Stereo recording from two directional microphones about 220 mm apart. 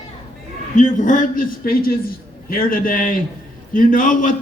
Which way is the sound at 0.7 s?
35° left (ahead or behind).